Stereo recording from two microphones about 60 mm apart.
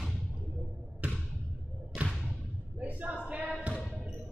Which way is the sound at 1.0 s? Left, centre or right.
Right.